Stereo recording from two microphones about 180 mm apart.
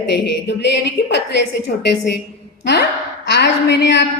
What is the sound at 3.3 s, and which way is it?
Speech, 70° left (ahead or behind).